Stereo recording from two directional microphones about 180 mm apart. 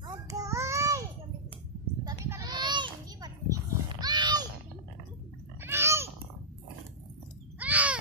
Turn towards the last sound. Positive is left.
turn(degrees=-10)  # may be behind; listen again after turning